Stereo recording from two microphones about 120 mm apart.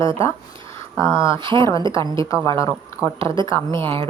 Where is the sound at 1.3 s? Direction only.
40° right (ahead or behind).